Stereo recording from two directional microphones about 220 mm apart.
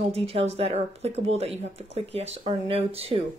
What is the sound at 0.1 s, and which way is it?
A woman's voice, 25° right (ahead or behind).